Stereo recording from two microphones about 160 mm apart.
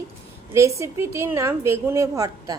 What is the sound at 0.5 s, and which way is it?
A woman's voice, 20° right (ahead or behind).